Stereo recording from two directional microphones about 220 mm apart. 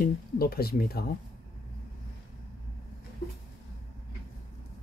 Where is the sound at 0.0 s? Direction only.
45° left (ahead or behind).